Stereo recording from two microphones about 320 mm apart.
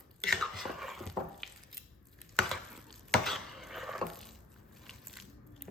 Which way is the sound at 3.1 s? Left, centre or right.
Centre.